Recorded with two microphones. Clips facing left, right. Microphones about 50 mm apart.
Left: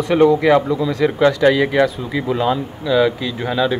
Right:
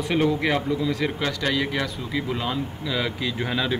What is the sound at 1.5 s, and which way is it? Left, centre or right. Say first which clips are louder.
Speech: left 10 dB; centre.